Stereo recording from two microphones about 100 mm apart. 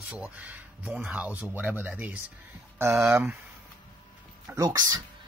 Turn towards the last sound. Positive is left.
turn(degrees=-40)  # may be behind; listen again after turning